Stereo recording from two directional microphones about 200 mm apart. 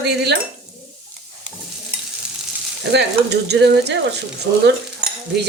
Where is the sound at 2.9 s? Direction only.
55° right (ahead or behind).